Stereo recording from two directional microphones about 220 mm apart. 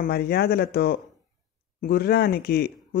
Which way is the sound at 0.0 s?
45° left (ahead or behind).